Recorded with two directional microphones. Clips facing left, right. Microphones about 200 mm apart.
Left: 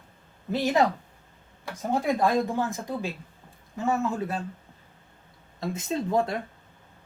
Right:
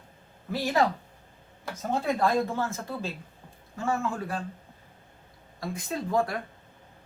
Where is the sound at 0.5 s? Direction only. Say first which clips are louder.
Left 2 dB; 20° left (ahead or behind).